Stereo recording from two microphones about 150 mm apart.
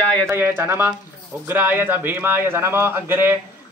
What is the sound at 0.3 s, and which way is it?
Speech, 15° right (ahead or behind).